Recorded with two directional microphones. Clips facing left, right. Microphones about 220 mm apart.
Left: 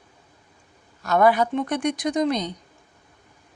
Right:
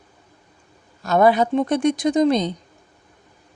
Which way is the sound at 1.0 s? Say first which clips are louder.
Right 2 dB; 25° right (ahead or behind).